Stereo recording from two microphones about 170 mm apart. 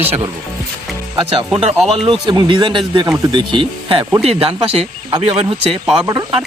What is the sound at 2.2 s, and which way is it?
Speech, 30° right (ahead or behind).